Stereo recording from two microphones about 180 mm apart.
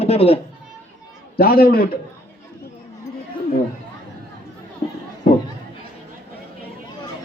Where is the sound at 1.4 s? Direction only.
55° left (ahead or behind).